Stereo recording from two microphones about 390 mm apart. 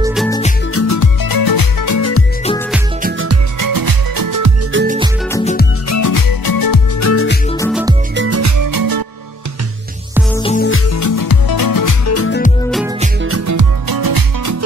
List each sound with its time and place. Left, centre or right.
0.0 s music: centre
0.7 s music: left
3.0 s music: right
3.5 s music: right
4.7 s music: right
5.3 s music: centre
5.9 s music: left
7.0 s music: left
7.5 s music: centre
8.2 s music: right
10.4 s music: centre
10.7 s music: left
12.1 s music: left
13.5 s music: right